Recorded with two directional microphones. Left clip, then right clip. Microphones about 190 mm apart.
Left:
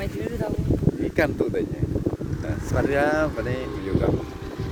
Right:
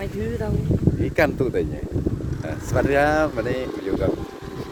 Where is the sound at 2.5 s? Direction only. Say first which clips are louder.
Right 3 dB; 55° right (ahead or behind).